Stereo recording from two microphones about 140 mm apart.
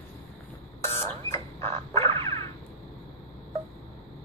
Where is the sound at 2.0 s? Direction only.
40° right (ahead or behind).